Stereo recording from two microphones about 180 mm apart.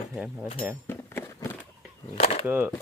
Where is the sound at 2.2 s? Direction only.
35° left (ahead or behind).